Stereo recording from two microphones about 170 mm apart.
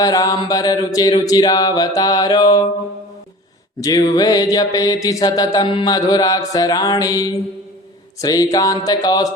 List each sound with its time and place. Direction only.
0.0 s mantra: 20° left (ahead or behind)
3.8 s mantra: 20° left (ahead or behind)